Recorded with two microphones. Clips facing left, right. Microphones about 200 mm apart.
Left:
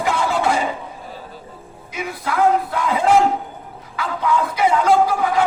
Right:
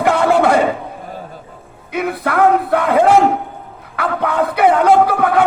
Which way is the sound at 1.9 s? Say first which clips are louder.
Right 7 dB; 60° right (ahead or behind).